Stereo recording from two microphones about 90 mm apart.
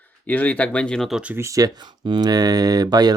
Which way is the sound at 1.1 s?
15° right (ahead or behind).